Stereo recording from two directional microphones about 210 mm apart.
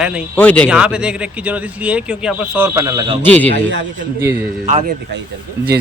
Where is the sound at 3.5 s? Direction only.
55° right (ahead or behind).